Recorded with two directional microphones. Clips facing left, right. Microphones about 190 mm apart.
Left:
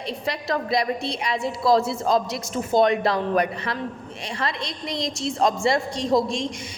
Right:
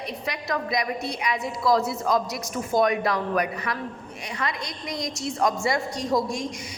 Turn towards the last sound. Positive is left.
turn(degrees=25)  # may be behind; listen again after turning